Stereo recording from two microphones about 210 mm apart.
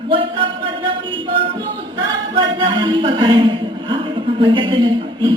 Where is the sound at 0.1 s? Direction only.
25° right (ahead or behind).